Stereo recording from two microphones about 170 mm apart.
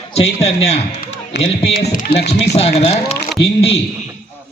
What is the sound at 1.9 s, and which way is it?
Speech, 65° left (ahead or behind).